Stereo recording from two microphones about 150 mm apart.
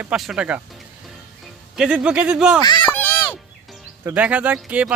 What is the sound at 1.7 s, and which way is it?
Speech, 5° right (ahead or behind).